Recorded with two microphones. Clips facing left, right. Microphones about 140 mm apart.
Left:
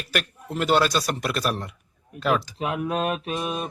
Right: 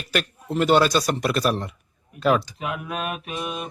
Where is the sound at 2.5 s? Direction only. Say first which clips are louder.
Left 4 dB; 35° left (ahead or behind).